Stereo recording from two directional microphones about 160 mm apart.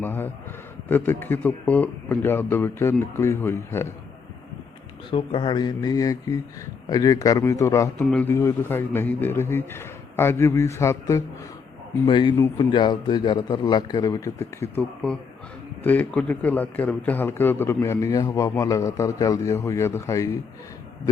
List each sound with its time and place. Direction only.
0.0 s a man's voice: 10° left (ahead or behind)
5.1 s a man's voice: 30° left (ahead or behind)
12.0 s a man's voice: 30° left (ahead or behind)